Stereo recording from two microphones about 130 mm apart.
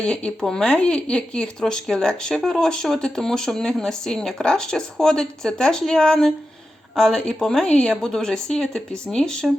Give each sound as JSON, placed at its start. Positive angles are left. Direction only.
{"t": 0.0, "sound": "speech", "side_deg": 10}